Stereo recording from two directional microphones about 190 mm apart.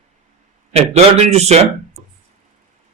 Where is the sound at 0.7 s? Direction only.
35° right (ahead or behind).